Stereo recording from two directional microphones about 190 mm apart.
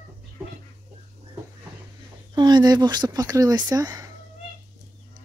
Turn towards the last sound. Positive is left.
turn(degrees=-20)  # may be behind; listen again after turning